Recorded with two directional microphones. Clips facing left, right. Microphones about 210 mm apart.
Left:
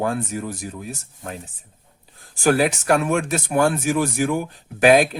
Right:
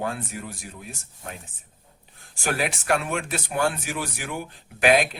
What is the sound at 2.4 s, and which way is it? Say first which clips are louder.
Speech: left 8 dB; 40° left (ahead or behind).